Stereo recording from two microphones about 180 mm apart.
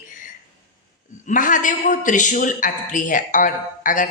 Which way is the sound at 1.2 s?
45° left (ahead or behind).